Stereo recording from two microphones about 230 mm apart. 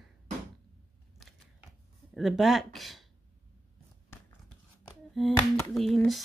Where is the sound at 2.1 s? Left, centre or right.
Centre.